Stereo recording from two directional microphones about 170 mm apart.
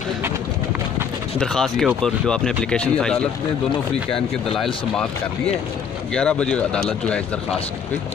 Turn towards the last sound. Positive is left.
turn(degrees=5)  # may be behind; listen again after turning